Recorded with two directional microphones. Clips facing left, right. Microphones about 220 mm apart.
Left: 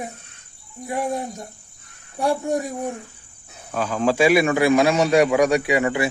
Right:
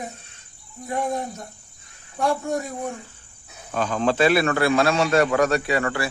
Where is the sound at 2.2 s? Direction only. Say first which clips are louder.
Left 2 dB; 15° left (ahead or behind).